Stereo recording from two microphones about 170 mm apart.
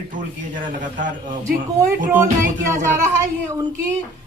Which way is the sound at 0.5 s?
50° right (ahead or behind).